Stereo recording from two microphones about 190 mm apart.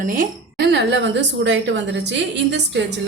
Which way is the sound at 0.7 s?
65° right (ahead or behind).